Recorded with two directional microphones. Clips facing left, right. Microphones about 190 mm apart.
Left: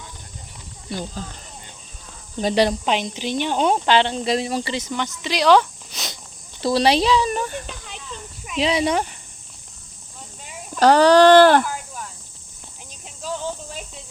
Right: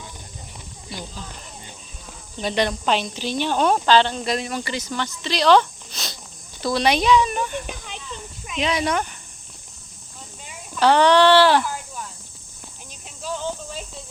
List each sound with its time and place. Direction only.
0.9 s speech: 50° left (ahead or behind)
2.4 s speech: 35° left (ahead or behind)
2.8 s speech: 15° left (ahead or behind)
6.6 s speech: 30° left (ahead or behind)
8.5 s speech: 30° left (ahead or behind)
10.8 s speech: 40° left (ahead or behind)